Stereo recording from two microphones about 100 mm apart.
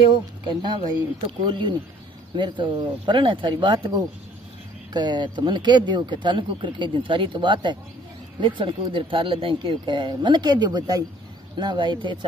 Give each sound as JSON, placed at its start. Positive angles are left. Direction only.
{"t": 0.1, "sound": "speech", "side_deg": -50}